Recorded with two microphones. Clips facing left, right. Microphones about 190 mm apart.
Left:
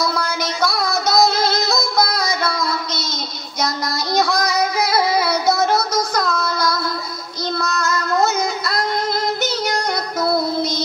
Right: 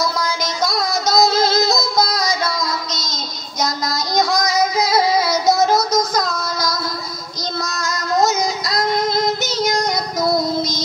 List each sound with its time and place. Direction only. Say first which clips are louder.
0.1 s music: even; 60° left (ahead or behind)
7.5 s child singing: left 4 dB; 60° left (ahead or behind)
9.4 s music: right 1 dB; 60° left (ahead or behind)